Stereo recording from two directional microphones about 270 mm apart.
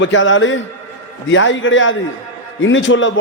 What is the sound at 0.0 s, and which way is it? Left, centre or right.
A man's voice, left.